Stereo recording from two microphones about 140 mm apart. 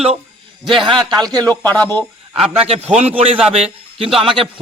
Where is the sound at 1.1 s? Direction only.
30° right (ahead or behind).